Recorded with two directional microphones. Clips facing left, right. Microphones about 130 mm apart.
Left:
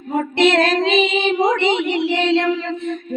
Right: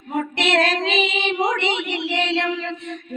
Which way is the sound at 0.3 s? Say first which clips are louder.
Left 6 dB; 40° left (ahead or behind).